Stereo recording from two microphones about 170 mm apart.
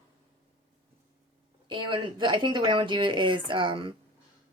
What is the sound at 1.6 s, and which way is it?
Speech, 30° right (ahead or behind).